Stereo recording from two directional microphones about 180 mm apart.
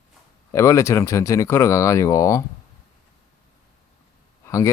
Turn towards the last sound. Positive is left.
turn(degrees=15)  # may be behind; listen again after turning